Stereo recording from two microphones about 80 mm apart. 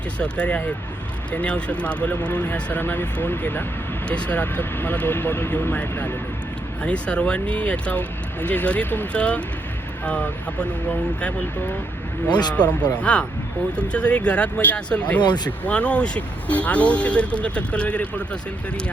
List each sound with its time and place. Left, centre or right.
0.2 s speech: centre
12.3 s speech: left
12.5 s speech: centre